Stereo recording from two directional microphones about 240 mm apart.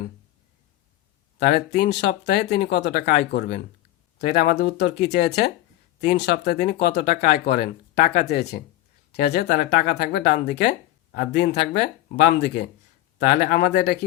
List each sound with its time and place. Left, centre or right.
1.4 s speech: left
13.1 s speech: left